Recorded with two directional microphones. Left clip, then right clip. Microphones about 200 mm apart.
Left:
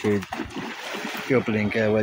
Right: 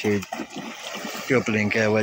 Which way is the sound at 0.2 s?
40° right (ahead or behind).